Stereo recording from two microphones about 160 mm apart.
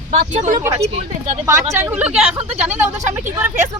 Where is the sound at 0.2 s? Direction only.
55° right (ahead or behind).